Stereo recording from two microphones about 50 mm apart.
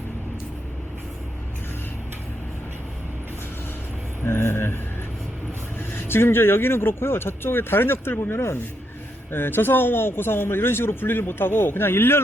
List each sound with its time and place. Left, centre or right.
4.3 s speech: left
6.1 s speech: left
9.3 s speech: left